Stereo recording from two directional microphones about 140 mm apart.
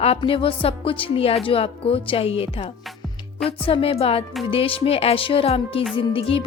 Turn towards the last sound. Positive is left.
turn(degrees=40)  # may be behind; listen again after turning